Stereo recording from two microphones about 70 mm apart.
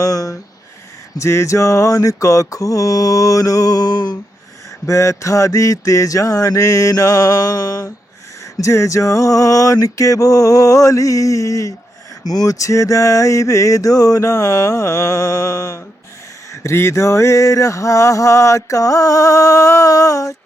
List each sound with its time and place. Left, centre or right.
0.0 s mantra: left
1.2 s mantra: left
4.9 s mantra: left
8.6 s mantra: left
12.2 s mantra: left
16.5 s mantra: left